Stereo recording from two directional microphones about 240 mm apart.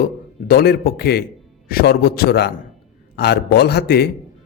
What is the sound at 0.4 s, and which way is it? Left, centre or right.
A man's voice, left.